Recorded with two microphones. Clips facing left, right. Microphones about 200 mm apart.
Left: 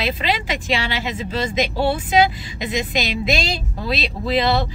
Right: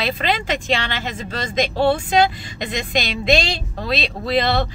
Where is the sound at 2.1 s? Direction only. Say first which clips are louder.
Even; 5° left (ahead or behind).